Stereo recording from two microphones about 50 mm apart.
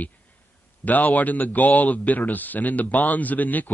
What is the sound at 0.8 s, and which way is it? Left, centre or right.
A man's voice, left.